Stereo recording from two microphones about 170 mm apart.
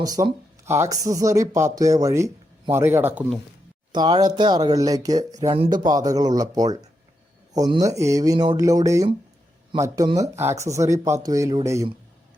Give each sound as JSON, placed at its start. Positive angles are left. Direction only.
{"t": 0.0, "sound": "speech", "side_deg": -20}
{"t": 3.9, "sound": "speech", "side_deg": -25}